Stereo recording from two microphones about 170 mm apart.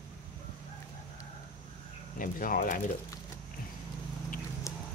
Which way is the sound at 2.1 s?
55° left (ahead or behind).